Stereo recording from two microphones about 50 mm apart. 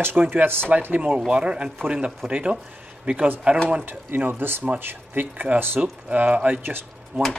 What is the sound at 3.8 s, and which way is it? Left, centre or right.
Speech, right.